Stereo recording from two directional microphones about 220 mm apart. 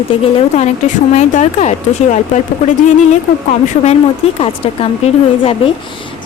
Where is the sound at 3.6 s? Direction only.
30° left (ahead or behind).